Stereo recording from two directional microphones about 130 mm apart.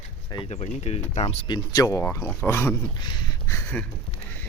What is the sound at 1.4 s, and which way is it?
Speech, 30° left (ahead or behind).